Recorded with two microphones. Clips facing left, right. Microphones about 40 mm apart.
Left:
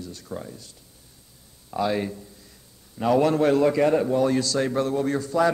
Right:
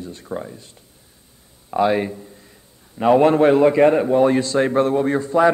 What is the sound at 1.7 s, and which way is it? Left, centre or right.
A man's voice, right.